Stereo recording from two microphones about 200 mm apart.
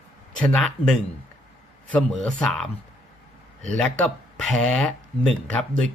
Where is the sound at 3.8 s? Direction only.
5° left (ahead or behind).